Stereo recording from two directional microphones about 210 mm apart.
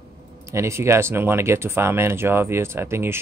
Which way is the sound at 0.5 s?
15° right (ahead or behind).